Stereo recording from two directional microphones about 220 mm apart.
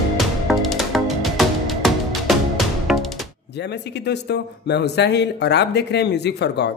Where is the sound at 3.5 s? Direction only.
50° left (ahead or behind).